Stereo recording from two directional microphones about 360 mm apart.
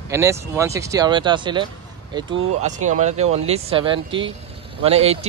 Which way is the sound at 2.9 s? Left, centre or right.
Centre.